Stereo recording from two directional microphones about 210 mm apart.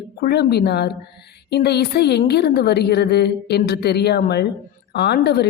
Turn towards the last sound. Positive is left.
turn(degrees=50)  # may be behind; listen again after turning